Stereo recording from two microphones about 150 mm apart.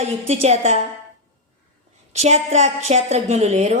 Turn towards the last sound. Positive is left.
turn(degrees=-50)  # may be behind; listen again after turning